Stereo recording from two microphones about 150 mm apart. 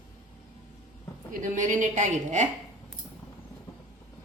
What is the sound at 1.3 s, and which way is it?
A woman's voice, 60° right (ahead or behind).